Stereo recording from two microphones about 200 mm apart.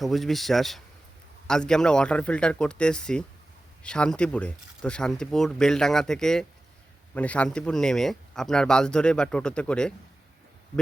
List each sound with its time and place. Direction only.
0.0 s speech: centre (ahead or behind)